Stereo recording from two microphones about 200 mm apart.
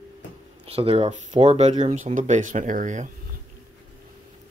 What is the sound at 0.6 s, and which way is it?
Speech, 30° right (ahead or behind).